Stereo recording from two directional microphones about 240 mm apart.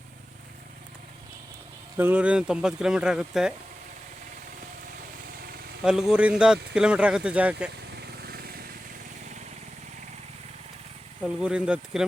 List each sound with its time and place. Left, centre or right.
2.0 s speech: centre
5.8 s speech: centre
7.9 s vehicle: right
11.2 s speech: centre